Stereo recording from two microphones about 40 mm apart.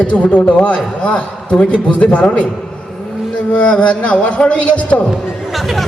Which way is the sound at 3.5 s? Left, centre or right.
Left.